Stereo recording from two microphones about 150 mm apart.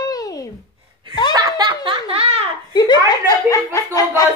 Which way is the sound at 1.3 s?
25° right (ahead or behind).